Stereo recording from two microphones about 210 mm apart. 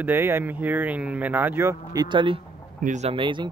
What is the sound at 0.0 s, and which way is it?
Speech, 10° right (ahead or behind).